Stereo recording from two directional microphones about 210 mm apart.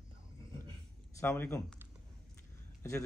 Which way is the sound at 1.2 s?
10° left (ahead or behind).